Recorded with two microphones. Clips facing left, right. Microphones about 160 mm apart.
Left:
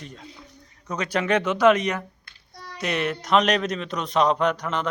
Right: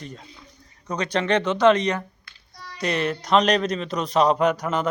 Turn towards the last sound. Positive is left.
turn(degrees=-10)  # may be behind; listen again after turning